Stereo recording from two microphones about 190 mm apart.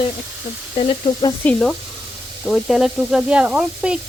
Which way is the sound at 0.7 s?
30° left (ahead or behind).